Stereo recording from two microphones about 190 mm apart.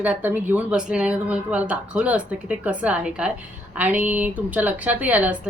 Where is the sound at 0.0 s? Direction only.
10° right (ahead or behind).